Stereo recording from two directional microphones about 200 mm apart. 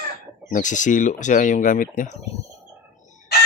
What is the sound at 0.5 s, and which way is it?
Speech, 40° left (ahead or behind).